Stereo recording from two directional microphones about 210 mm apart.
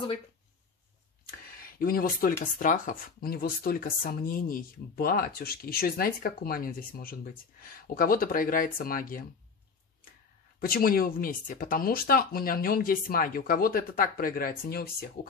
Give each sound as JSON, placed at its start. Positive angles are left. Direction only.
{"t": 1.6, "sound": "speech", "side_deg": 45}
{"t": 10.6, "sound": "speech", "side_deg": 45}